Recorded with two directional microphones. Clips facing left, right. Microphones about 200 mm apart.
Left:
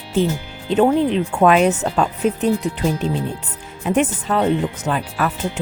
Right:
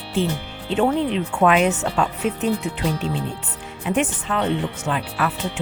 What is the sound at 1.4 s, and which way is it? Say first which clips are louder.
Speech: left 3 dB; 40° left (ahead or behind).